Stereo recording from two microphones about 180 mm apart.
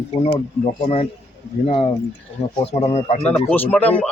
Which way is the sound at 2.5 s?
35° left (ahead or behind).